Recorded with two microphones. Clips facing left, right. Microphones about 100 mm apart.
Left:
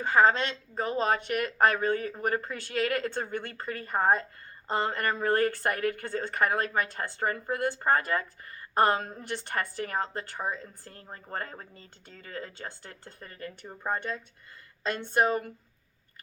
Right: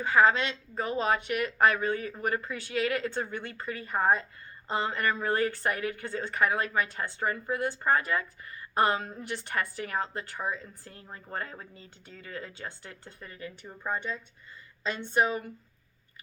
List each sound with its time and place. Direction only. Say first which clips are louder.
0.0 s speech: even; 35° left (ahead or behind)